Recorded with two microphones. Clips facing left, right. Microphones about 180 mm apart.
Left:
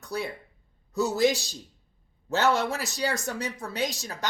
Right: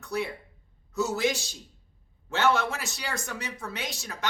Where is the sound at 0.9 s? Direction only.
35° left (ahead or behind).